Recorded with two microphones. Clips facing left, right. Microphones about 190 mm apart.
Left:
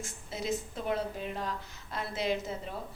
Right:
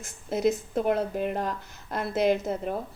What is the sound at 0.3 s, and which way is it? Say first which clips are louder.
A woman's voice: right 10 dB; 55° right (ahead or behind).